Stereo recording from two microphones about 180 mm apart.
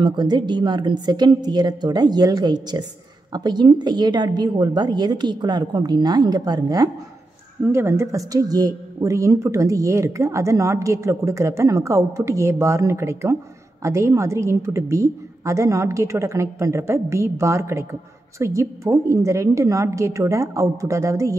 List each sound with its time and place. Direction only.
0.0 s a woman's voice: 25° right (ahead or behind)